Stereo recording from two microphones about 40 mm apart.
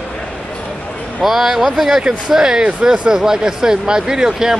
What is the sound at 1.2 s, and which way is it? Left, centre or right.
Speech, centre.